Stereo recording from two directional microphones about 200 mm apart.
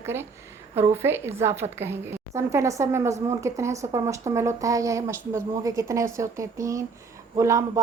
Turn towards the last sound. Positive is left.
turn(degrees=-15)  # may be behind; listen again after turning